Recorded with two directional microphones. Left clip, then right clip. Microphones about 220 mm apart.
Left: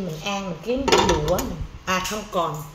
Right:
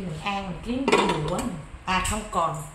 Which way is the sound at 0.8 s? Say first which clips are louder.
Left 3 dB; 25° left (ahead or behind).